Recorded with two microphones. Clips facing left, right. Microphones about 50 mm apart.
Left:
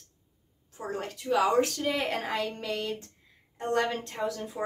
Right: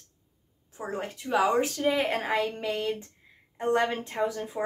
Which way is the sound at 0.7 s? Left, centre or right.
Centre.